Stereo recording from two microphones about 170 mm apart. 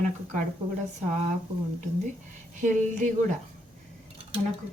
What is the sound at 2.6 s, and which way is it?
Speech, 45° right (ahead or behind).